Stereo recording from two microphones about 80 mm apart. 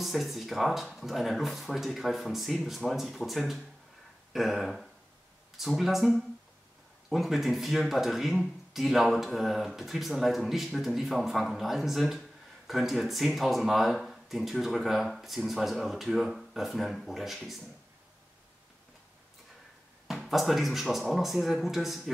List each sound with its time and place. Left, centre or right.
0.0 s speech: centre
20.1 s speech: centre